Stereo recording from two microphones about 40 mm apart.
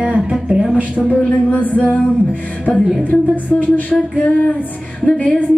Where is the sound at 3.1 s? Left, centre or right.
Left.